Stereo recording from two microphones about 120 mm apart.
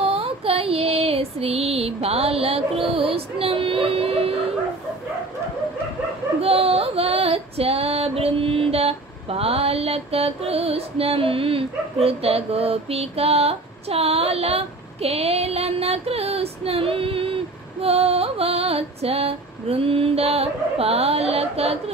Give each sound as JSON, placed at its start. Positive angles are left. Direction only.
{"t": 0.0, "sound": "female singing", "side_deg": -50}
{"t": 3.1, "sound": "a sound", "side_deg": -50}
{"t": 6.4, "sound": "child singing", "side_deg": -55}
{"t": 17.8, "sound": "music", "side_deg": -55}